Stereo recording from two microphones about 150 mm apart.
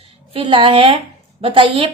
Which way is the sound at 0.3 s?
35° right (ahead or behind).